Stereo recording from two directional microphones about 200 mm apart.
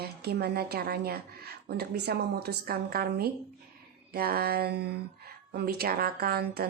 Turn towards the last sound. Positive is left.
turn(degrees=-50)  # may be behind; listen again after turning